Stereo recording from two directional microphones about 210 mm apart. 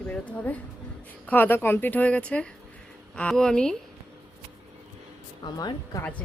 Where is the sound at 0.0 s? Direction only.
5° left (ahead or behind).